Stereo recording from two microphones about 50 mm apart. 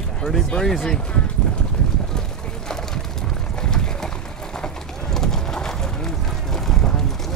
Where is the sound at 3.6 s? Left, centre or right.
Centre.